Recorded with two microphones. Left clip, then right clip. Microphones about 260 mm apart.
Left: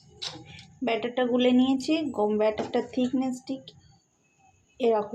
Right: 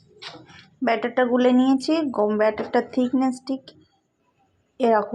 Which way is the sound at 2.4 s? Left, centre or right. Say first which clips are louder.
Right 4 dB; right.